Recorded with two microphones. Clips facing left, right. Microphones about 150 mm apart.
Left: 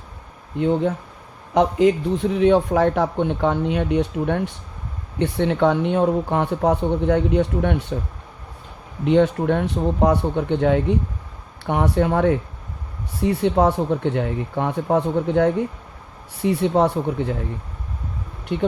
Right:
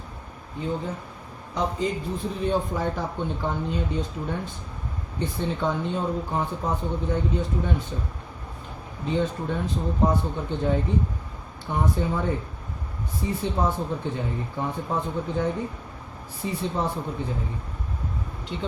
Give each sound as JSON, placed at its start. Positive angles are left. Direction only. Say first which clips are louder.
{"t": 0.6, "sound": "speech", "louder": "left 10 dB", "side_deg": 75}
{"t": 9.0, "sound": "speech", "louder": "left 9 dB", "side_deg": 70}
{"t": 18.5, "sound": "speech", "louder": "left 10 dB", "side_deg": 60}